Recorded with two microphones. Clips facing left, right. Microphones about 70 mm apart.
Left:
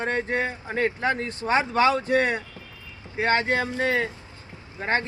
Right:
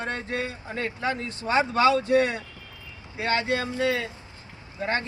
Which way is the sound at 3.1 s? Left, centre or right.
Left.